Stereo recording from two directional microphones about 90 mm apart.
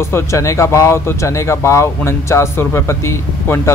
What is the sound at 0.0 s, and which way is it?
Speech, 30° left (ahead or behind).